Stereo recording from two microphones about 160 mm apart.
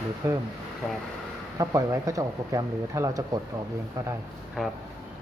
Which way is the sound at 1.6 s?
20° right (ahead or behind).